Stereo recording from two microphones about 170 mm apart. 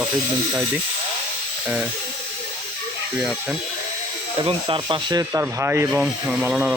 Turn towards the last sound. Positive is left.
turn(degrees=-5)  # may be behind; listen again after turning